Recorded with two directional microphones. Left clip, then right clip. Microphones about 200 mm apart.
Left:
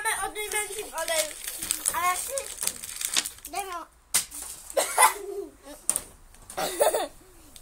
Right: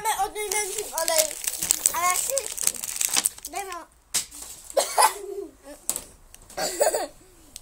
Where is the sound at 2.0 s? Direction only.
40° right (ahead or behind).